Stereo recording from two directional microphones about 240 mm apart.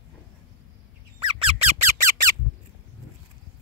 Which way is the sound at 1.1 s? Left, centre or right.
Right.